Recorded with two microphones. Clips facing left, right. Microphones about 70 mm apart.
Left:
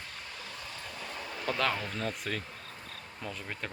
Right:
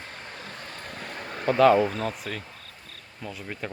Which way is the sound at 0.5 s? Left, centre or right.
Right.